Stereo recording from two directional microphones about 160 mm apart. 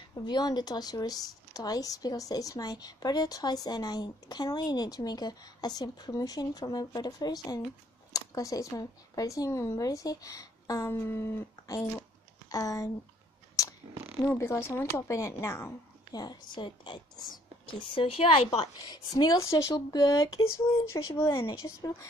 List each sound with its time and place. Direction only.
0.1 s speech: 25° left (ahead or behind)
13.6 s fart: 20° left (ahead or behind)
14.2 s speech: 15° left (ahead or behind)